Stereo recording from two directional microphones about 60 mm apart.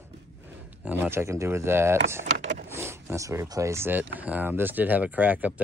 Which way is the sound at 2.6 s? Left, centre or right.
Right.